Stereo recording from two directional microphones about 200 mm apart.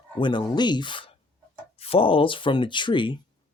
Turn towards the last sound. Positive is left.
turn(degrees=25)  # may be behind; listen again after turning